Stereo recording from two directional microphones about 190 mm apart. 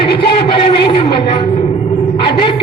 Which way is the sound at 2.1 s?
25° left (ahead or behind).